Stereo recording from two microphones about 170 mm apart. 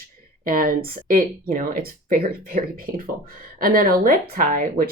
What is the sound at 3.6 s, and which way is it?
Speech, 55° right (ahead or behind).